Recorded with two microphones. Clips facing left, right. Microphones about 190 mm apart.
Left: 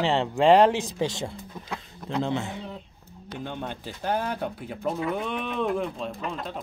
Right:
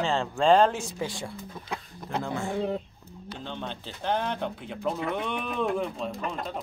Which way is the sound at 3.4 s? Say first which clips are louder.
Left 3 dB; 10° left (ahead or behind).